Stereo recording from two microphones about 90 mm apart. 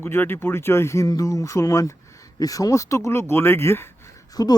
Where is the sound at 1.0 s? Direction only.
40° left (ahead or behind).